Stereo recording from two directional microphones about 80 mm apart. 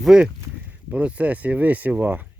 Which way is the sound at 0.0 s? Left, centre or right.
Centre.